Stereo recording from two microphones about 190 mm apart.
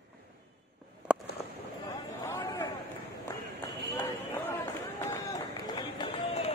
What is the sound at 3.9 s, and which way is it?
Run, 10° left (ahead or behind).